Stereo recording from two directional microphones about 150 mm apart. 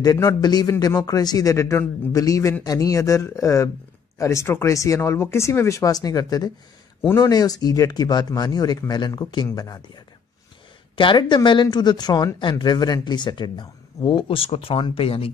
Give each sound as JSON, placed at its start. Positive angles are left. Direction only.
{"t": 0.0, "sound": "a man's voice", "side_deg": 20}